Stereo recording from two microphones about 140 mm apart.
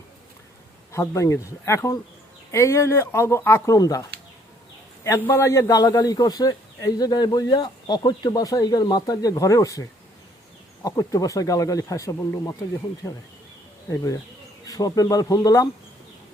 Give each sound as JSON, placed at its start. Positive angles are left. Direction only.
{"t": 0.9, "sound": "a man's voice", "side_deg": 20}
{"t": 5.0, "sound": "a man's voice", "side_deg": 20}
{"t": 10.8, "sound": "a man's voice", "side_deg": 25}